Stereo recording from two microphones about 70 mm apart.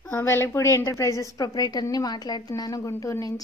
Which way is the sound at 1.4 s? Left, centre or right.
Left.